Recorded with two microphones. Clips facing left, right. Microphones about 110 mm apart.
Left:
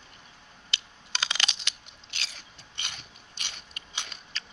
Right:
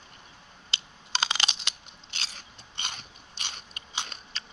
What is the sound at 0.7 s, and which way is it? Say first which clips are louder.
Computer keyboard: right 3 dB; 30° right (ahead or behind).